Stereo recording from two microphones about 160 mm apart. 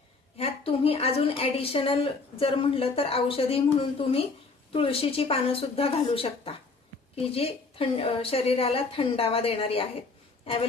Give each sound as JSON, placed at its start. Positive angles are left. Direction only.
{"t": 0.3, "sound": "a woman's voice", "side_deg": 40}